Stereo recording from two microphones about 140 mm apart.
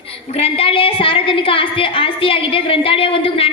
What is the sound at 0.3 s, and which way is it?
A woman's voice, 45° left (ahead or behind).